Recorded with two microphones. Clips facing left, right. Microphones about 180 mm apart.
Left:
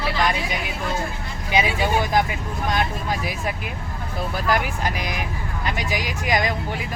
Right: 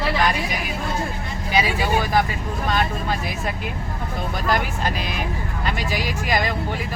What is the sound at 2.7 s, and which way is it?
Speech, 10° left (ahead or behind).